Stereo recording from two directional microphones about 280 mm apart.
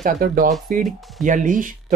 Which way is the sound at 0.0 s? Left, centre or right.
Right.